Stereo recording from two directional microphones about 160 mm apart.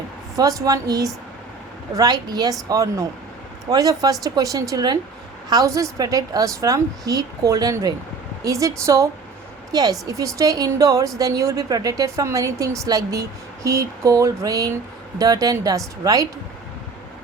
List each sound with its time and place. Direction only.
0.3 s a woman's voice: 20° right (ahead or behind)